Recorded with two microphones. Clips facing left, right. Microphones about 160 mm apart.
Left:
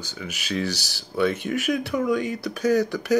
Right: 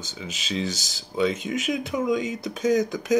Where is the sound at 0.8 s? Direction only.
70° left (ahead or behind).